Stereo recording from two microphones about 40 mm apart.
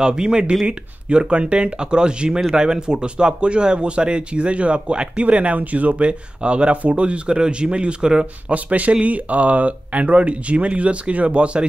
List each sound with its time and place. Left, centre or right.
0.0 s speech: centre
8.5 s speech: right